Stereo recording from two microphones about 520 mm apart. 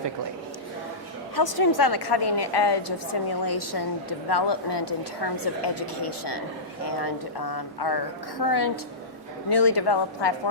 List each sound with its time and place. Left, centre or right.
1.4 s a woman's voice: left